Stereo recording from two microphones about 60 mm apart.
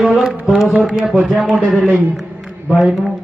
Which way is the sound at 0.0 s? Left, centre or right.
Centre.